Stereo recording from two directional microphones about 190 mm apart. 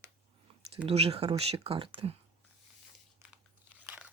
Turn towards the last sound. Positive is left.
turn(degrees=-10)  # may be behind; listen again after turning